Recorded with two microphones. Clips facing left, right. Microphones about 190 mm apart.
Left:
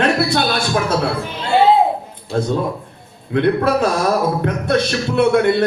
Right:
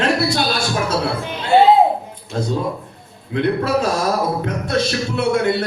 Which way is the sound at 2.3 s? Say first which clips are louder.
Left 3 dB; 55° left (ahead or behind).